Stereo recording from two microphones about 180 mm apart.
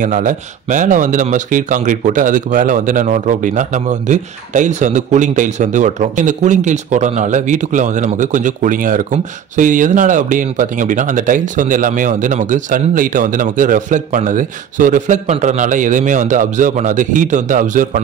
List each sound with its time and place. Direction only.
0.0 s speech: 45° right (ahead or behind)